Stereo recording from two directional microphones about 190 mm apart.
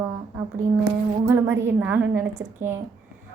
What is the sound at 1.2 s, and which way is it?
A woman's voice, 15° right (ahead or behind).